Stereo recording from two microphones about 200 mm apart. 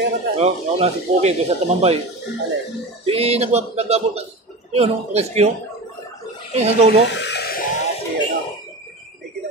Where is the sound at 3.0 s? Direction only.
30° right (ahead or behind).